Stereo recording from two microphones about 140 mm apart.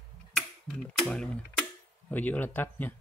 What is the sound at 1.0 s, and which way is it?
Speech, 5° left (ahead or behind).